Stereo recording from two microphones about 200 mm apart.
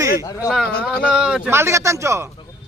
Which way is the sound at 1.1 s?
5° right (ahead or behind).